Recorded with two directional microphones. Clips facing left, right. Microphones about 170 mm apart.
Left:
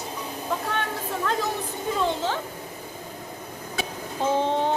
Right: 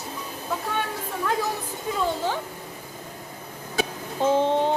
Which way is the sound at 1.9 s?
5° right (ahead or behind).